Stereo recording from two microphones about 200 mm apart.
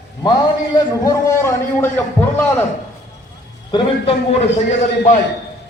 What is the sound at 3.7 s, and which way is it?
Speech, 25° left (ahead or behind).